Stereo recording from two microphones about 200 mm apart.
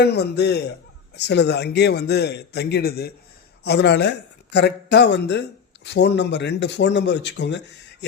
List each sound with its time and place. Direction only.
0.0 s speech: 55° left (ahead or behind)